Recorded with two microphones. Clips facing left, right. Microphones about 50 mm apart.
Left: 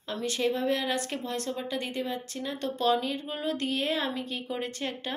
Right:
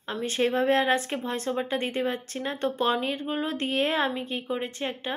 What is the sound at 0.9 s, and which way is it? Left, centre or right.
Speech, right.